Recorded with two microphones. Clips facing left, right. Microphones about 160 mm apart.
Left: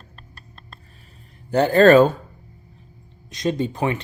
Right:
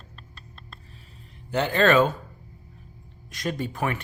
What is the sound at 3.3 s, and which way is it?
Speech, 20° left (ahead or behind).